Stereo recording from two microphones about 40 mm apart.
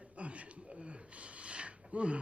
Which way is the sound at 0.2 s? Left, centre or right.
Right.